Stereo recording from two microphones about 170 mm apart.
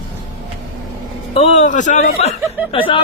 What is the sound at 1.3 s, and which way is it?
Chuckle, 40° left (ahead or behind).